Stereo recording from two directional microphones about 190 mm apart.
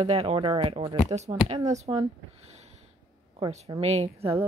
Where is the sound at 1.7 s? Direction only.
35° right (ahead or behind).